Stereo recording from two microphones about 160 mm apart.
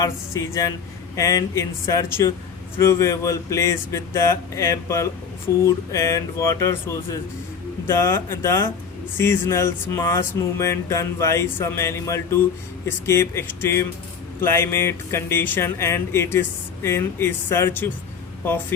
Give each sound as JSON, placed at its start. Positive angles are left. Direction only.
{"t": 0.0, "sound": "speech", "side_deg": 20}